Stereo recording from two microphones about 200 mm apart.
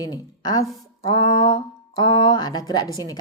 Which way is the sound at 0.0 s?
20° left (ahead or behind).